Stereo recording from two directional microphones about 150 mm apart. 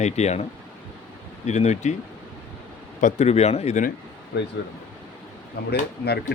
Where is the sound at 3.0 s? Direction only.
45° left (ahead or behind).